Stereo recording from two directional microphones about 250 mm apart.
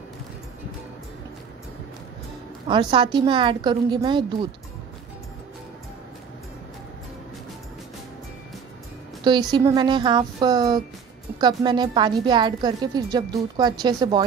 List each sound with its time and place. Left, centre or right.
2.7 s a woman's voice: centre
9.2 s a woman's voice: centre